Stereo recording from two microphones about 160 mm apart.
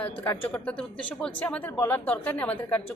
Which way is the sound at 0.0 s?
10° left (ahead or behind).